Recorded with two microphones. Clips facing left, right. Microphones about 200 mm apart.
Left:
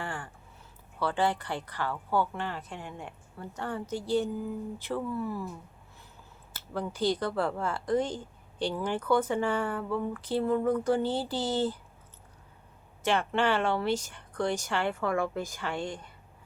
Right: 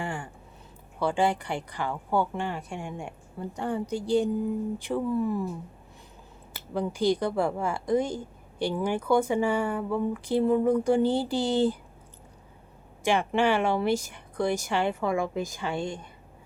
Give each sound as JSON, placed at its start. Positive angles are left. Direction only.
{"t": 0.0, "sound": "a sound", "side_deg": -10}
{"t": 0.9, "sound": "speech", "side_deg": -15}
{"t": 6.5, "sound": "speech", "side_deg": -15}
{"t": 13.0, "sound": "speech", "side_deg": -10}